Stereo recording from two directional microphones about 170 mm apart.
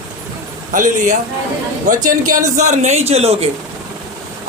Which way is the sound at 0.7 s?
50° right (ahead or behind).